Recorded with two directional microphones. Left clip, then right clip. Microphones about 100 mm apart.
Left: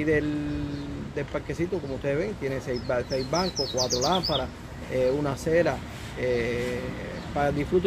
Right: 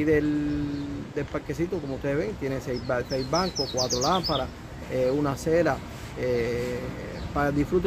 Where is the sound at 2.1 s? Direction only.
50° right (ahead or behind).